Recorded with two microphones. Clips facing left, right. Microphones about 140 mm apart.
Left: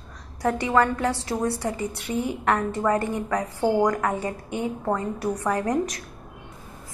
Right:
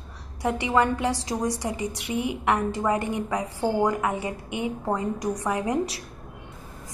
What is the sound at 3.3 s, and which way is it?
A woman's voice, 10° right (ahead or behind).